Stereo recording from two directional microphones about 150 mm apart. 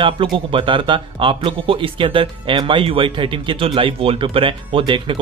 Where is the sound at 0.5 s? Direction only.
35° right (ahead or behind).